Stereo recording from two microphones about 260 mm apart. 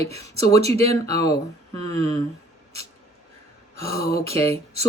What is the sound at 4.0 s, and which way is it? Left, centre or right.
Speech, left.